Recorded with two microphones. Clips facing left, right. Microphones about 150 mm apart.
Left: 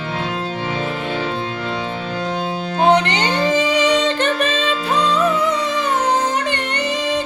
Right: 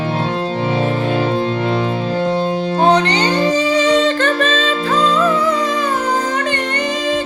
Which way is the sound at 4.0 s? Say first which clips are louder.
Right 3 dB; 20° left (ahead or behind).